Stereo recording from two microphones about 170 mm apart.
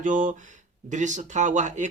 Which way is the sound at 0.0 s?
50° right (ahead or behind).